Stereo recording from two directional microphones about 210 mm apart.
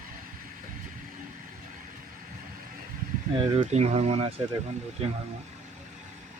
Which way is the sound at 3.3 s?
30° right (ahead or behind).